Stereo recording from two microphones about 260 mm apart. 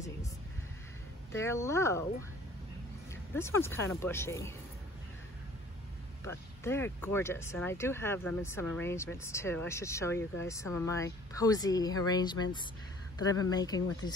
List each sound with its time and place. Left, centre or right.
1.3 s speech: centre
3.3 s speech: centre
6.2 s speech: centre